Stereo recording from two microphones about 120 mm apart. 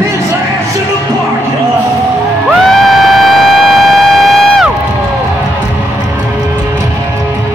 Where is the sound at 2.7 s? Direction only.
Centre (ahead or behind).